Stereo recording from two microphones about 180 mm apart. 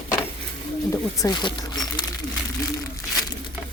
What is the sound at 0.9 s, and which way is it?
Speech, 20° left (ahead or behind).